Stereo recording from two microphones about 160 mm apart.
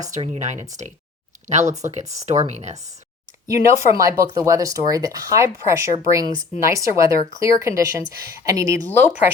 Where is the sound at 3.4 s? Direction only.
20° right (ahead or behind).